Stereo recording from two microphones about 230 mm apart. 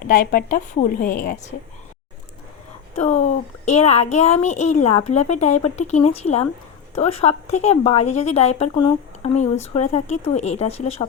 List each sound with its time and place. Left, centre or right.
0.1 s a woman's voice: left
3.0 s a woman's voice: left